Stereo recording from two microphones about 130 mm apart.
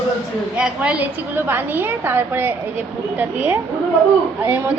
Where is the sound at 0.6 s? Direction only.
10° right (ahead or behind).